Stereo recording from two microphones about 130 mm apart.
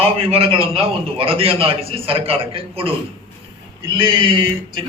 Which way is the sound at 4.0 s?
40° right (ahead or behind).